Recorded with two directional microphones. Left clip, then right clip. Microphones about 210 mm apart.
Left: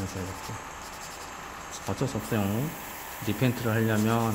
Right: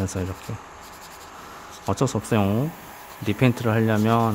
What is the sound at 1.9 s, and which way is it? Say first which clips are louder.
Rub: right 8 dB; 30° right (ahead or behind).